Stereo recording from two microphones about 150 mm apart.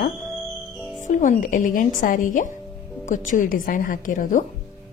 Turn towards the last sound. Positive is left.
turn(degrees=60)  # may be behind; listen again after turning